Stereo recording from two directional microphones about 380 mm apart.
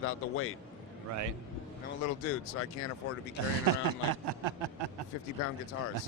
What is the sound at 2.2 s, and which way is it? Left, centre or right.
Speech, left.